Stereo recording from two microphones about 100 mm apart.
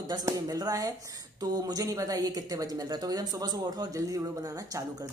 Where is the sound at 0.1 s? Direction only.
40° right (ahead or behind).